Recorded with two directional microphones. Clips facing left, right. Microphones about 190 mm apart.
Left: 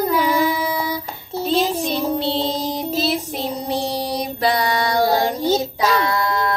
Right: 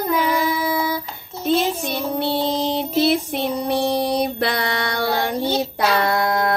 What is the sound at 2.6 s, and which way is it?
Child singing, 60° right (ahead or behind).